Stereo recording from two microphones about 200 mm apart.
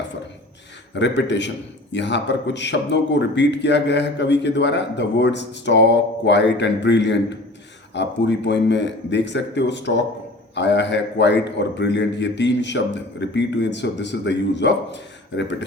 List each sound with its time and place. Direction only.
0.9 s a man's voice: 60° left (ahead or behind)